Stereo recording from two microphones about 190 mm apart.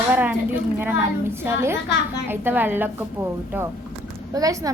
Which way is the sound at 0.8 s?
10° right (ahead or behind).